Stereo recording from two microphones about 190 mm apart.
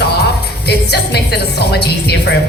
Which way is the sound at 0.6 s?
60° left (ahead or behind).